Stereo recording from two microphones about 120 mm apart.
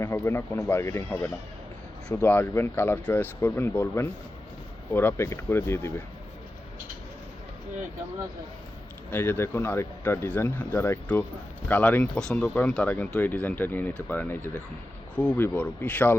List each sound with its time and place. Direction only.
0.0 s speech: 20° left (ahead or behind)
9.0 s speech: 15° left (ahead or behind)